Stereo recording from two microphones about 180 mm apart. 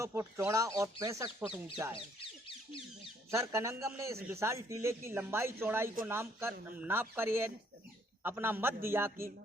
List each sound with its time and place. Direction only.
0.0 s a man's voice: 15° right (ahead or behind)
2.0 s speech: 30° left (ahead or behind)
3.3 s a man's voice: 15° right (ahead or behind)